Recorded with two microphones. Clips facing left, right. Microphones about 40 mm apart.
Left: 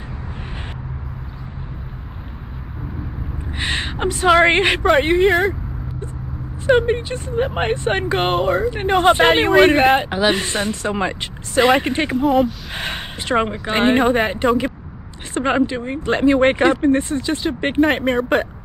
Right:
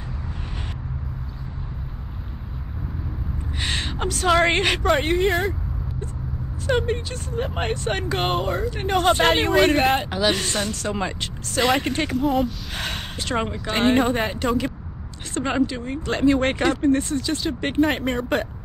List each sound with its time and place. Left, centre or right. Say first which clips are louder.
3.5 s speech: left 4 dB; left
4.8 s speech: left 7 dB; centre
6.6 s speech: left 7 dB; left
8.2 s speech: left 6 dB; centre
8.6 s speech: left 4 dB; centre
12.3 s speech: left 7 dB; centre
12.7 s speech: left 3 dB; centre
17.8 s speech: left 5 dB; centre